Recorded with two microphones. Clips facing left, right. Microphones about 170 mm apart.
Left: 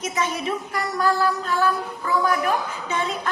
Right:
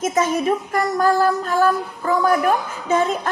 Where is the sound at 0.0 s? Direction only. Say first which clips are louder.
Right 7 dB; 45° right (ahead or behind).